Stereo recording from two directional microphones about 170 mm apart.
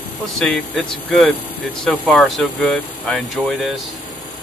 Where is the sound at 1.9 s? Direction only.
5° left (ahead or behind).